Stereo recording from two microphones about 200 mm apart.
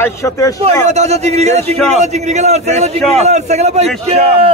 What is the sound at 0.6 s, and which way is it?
A man's voice, 35° right (ahead or behind).